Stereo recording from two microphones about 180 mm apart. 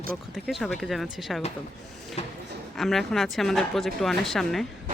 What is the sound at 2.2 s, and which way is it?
Speech, 35° left (ahead or behind).